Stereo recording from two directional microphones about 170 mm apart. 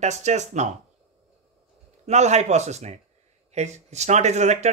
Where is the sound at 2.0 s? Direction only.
40° right (ahead or behind).